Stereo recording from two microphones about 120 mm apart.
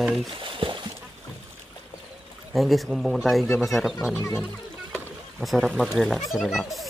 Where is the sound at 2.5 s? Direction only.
Centre (ahead or behind).